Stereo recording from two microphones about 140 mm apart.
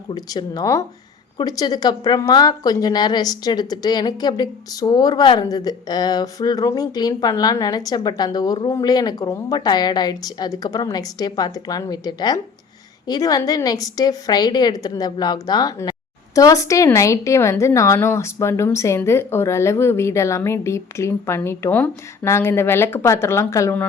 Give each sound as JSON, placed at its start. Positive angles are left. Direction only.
{"t": 0.1, "sound": "a woman's voice", "side_deg": 30}